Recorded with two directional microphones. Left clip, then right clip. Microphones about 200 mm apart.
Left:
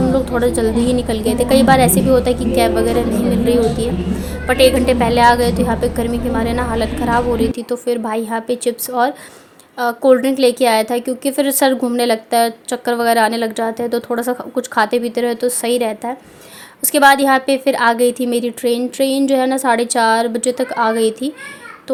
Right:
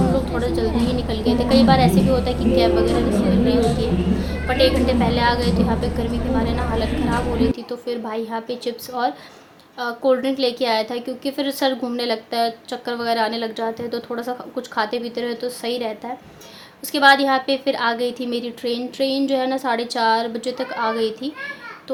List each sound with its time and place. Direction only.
0.0 s a sound: centre (ahead or behind)
0.3 s a woman's voice: 35° left (ahead or behind)
0.7 s a woman's voice: centre (ahead or behind)
1.0 s a woman's voice: 35° left (ahead or behind)
1.9 s a woman's voice: centre (ahead or behind)
2.6 s a woman's voice: 35° left (ahead or behind)
2.8 s a woman's voice: centre (ahead or behind)
4.4 s a woman's voice: 35° left (ahead or behind)
6.8 s a woman's voice: centre (ahead or behind)
7.5 s a woman's voice: 35° left (ahead or behind)